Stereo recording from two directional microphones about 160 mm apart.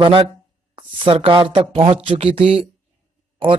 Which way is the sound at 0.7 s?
30° right (ahead or behind).